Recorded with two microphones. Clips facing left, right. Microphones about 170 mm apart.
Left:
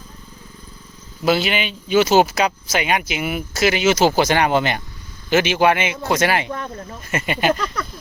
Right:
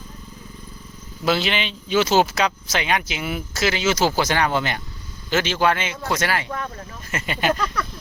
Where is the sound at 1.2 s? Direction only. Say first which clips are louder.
Left 3 dB; 5° left (ahead or behind).